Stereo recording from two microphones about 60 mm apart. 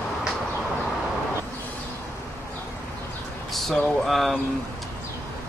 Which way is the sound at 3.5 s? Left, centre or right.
Centre.